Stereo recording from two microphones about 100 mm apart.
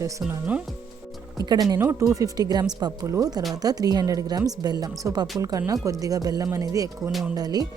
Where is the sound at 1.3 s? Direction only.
40° right (ahead or behind).